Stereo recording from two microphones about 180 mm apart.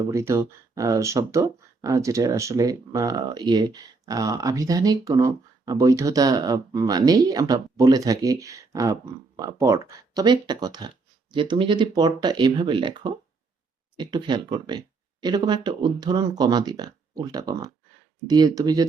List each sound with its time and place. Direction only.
0.1 s speech: 15° right (ahead or behind)